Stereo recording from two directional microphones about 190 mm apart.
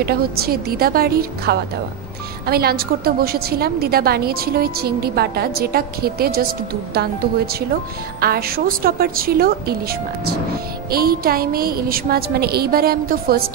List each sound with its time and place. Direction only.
0.0 s a woman's voice: 55° right (ahead or behind)